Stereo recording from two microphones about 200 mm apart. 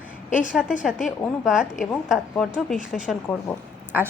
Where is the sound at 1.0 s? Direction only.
Centre (ahead or behind).